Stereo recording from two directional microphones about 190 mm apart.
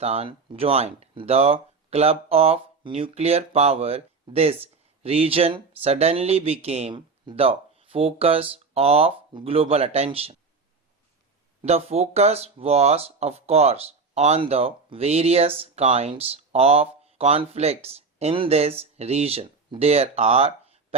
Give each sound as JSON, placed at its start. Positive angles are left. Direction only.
{"t": 0.0, "sound": "speech", "side_deg": -30}
{"t": 11.6, "sound": "speech", "side_deg": -35}